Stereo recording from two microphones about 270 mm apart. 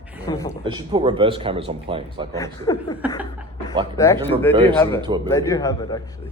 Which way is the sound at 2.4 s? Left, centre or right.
Centre.